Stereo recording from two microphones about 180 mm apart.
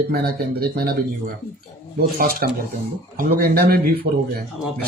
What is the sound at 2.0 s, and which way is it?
Speech, 55° right (ahead or behind).